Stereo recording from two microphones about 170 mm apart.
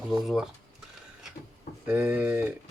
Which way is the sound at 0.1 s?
5° right (ahead or behind).